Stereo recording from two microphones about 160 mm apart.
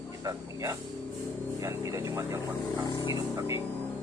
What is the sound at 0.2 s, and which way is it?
Speech, 20° right (ahead or behind).